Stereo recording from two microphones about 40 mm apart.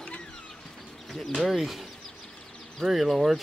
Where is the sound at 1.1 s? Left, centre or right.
Centre.